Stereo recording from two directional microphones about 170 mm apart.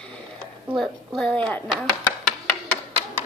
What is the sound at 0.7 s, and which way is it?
Speech, centre (ahead or behind).